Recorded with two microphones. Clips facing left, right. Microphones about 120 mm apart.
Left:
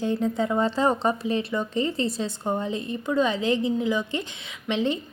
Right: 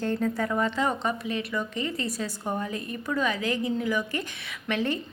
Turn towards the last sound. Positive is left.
turn(degrees=20)  # may be behind; listen again after turning